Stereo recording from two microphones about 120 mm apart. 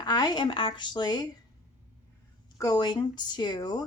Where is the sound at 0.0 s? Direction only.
35° left (ahead or behind).